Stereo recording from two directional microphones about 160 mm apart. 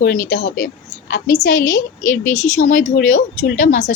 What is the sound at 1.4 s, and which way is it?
A woman's voice, 50° left (ahead or behind).